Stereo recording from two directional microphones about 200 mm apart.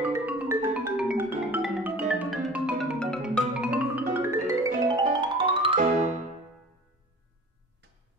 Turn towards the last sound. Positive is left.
turn(degrees=-35)  # may be behind; listen again after turning